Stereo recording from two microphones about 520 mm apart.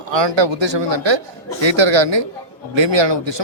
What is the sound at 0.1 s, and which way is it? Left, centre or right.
Speech, right.